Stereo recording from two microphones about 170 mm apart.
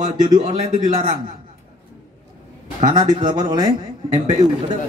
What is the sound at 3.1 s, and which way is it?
A man's voice, 25° right (ahead or behind).